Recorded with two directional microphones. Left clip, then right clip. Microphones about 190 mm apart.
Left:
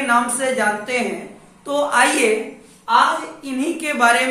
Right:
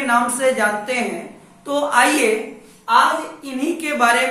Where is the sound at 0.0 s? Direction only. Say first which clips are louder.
Right 1 dB; centre (ahead or behind).